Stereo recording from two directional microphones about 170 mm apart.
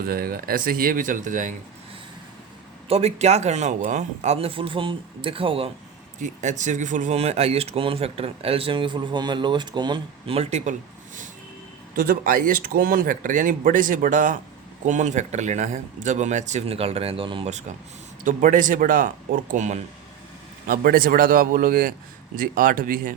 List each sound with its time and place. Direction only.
0.0 s speech: 60° right (ahead or behind)
2.9 s speech: 40° right (ahead or behind)
6.1 s speech: 45° right (ahead or behind)
11.9 s a man's voice: 55° right (ahead or behind); by 17.5 s 30° right (ahead or behind)
18.2 s a man's voice: 50° right (ahead or behind)
20.7 s speech: 60° right (ahead or behind)